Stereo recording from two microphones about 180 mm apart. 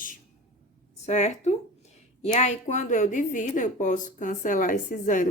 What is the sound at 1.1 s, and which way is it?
A woman's voice, 40° left (ahead or behind).